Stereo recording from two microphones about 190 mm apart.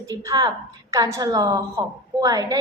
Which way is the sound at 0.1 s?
20° right (ahead or behind).